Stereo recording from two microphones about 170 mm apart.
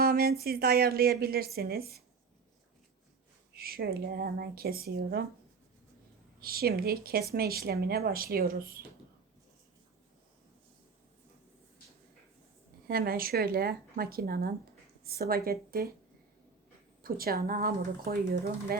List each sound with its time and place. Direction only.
0.0 s speech: 60° right (ahead or behind)
3.5 s speech: 65° right (ahead or behind)
6.4 s speech: 60° right (ahead or behind)
12.9 s speech: 60° right (ahead or behind)
17.0 s speech: 60° right (ahead or behind)